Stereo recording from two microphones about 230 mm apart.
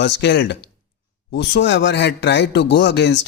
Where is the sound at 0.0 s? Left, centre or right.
Left.